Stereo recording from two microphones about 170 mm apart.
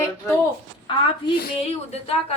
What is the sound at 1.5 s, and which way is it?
Speech, 35° left (ahead or behind).